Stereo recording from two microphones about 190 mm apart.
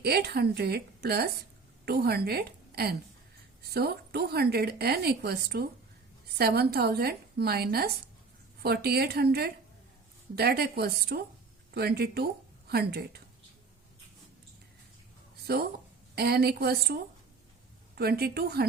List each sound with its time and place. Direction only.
0.0 s a woman's voice: 55° right (ahead or behind)
15.5 s a woman's voice: 55° right (ahead or behind)